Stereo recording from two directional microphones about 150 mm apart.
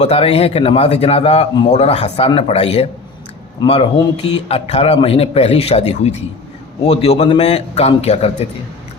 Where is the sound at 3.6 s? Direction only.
30° left (ahead or behind).